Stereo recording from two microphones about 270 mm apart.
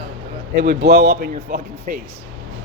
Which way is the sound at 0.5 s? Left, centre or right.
Right.